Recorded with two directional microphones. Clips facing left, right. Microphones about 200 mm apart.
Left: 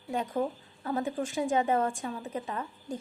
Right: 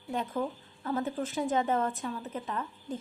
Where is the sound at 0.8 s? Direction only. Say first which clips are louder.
Left 1 dB; 15° left (ahead or behind).